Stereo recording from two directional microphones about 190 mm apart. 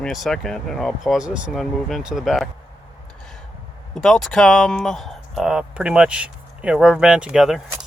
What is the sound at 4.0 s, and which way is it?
Speech, centre (ahead or behind).